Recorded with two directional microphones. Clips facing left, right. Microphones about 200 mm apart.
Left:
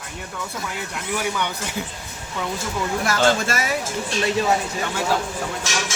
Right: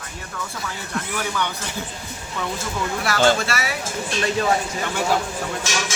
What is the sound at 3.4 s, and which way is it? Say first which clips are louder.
Speech: left 1 dB; 45° left (ahead or behind).